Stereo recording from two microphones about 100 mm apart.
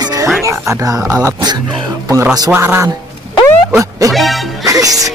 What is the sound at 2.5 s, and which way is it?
Speech, 25° right (ahead or behind).